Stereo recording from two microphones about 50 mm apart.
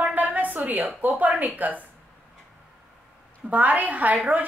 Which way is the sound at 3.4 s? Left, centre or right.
Right.